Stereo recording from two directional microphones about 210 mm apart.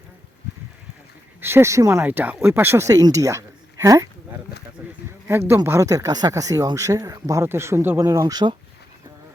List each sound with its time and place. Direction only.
1.4 s speech: 10° right (ahead or behind)
4.8 s a sound: 10° right (ahead or behind)
5.3 s speech: 10° right (ahead or behind)